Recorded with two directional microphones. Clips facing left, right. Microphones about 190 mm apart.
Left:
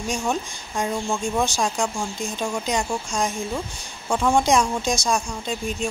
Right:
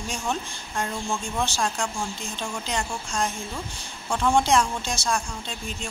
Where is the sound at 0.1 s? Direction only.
10° left (ahead or behind).